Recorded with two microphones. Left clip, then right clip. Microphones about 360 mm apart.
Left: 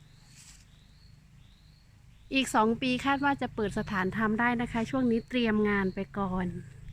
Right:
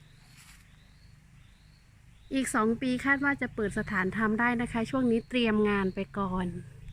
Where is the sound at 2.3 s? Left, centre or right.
Centre.